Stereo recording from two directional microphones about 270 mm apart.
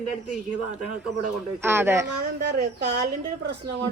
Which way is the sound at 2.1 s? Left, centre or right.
Right.